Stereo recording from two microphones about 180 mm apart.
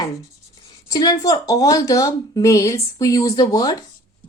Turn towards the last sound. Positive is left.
turn(degrees=20)  # may be behind; listen again after turning